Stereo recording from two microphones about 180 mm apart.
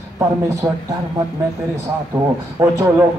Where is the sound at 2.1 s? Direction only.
20° right (ahead or behind).